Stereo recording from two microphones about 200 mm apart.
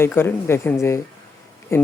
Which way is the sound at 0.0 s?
10° left (ahead or behind).